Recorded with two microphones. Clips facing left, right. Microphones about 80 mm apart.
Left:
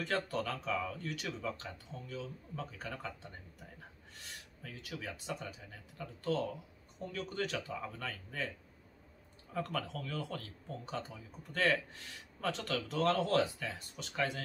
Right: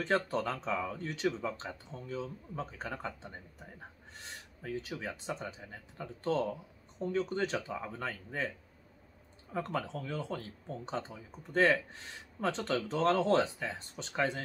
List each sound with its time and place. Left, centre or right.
0.0 s speech: right
9.5 s speech: right